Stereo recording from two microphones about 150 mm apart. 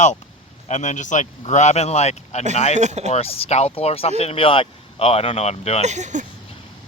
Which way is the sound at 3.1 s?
40° left (ahead or behind).